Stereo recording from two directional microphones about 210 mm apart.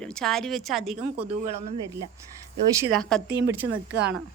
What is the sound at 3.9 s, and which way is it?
Speech, 55° right (ahead or behind).